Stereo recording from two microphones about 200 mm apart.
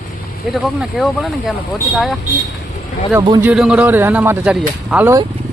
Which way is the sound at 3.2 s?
20° right (ahead or behind).